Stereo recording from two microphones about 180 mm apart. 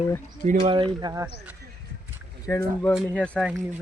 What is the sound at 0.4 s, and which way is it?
Speech, 30° right (ahead or behind).